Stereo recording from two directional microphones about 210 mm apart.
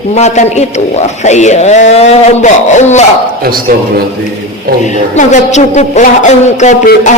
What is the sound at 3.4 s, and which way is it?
Speech, 45° right (ahead or behind).